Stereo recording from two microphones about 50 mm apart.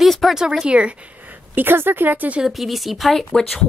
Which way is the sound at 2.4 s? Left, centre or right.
Centre.